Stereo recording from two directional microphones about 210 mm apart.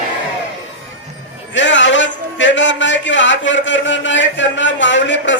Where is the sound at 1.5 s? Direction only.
60° left (ahead or behind).